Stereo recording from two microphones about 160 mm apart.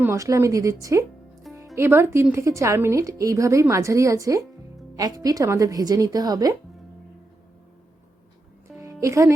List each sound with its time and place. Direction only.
0.0 s a woman's voice: 20° right (ahead or behind)
8.8 s music: 20° right (ahead or behind)